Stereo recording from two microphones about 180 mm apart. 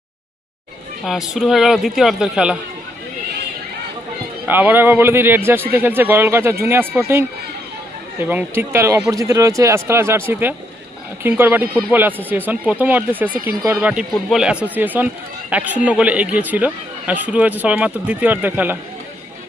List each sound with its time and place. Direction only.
1.0 s a man's voice: centre (ahead or behind)
4.4 s speech: 10° right (ahead or behind)
13.3 s speech: 55° right (ahead or behind)
13.7 s speech: 5° right (ahead or behind)